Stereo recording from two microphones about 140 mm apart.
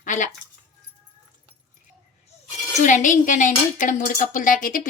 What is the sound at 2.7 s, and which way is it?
A woman's voice, 60° left (ahead or behind).